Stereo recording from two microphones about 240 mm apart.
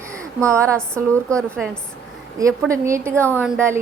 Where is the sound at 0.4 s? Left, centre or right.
Centre.